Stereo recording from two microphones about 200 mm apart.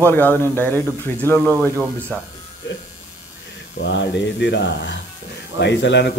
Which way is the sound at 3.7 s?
60° left (ahead or behind).